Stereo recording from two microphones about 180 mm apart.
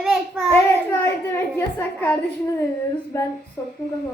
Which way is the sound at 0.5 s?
15° left (ahead or behind).